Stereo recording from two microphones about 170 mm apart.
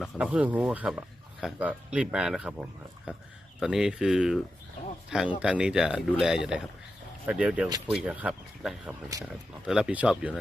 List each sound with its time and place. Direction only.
0.0 s speech: 5° right (ahead or behind)
5.4 s speech: 5° right (ahead or behind)
9.1 s speech: 20° right (ahead or behind)
9.6 s speech: 5° right (ahead or behind)